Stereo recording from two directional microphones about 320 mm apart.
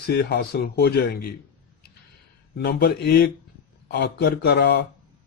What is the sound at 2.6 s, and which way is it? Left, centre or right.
Speech, left.